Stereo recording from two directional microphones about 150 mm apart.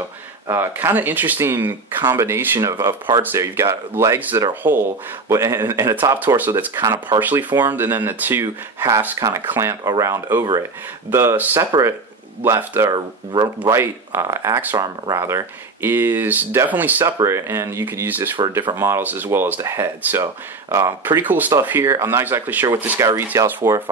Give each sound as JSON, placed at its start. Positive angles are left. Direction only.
{"t": 0.5, "sound": "speech", "side_deg": -15}
{"t": 12.9, "sound": "speech", "side_deg": -30}
{"t": 13.6, "sound": "speech", "side_deg": -15}